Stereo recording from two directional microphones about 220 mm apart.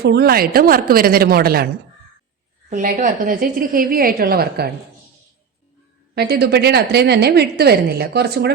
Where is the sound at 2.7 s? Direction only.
35° right (ahead or behind).